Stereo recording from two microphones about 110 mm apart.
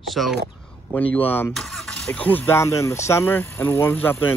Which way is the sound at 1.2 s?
20° left (ahead or behind).